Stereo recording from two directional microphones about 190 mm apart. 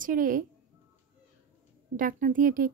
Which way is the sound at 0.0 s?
45° right (ahead or behind).